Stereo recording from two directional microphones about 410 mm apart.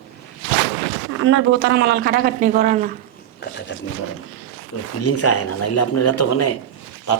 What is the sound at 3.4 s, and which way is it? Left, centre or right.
Speech, left.